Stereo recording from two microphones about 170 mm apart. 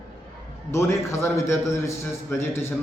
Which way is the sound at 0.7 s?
15° left (ahead or behind).